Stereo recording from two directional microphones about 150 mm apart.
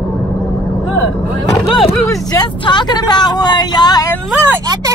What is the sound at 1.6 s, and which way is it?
Speech, centre (ahead or behind).